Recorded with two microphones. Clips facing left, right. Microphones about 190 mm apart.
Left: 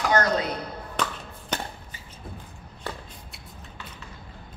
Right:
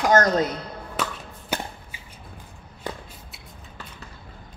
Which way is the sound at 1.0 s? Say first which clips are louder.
Even; 5° right (ahead or behind).